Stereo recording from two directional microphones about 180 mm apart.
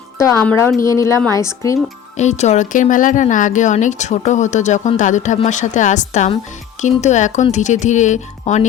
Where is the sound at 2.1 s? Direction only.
40° left (ahead or behind).